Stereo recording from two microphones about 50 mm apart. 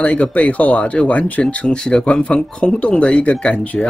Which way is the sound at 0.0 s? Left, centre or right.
Left.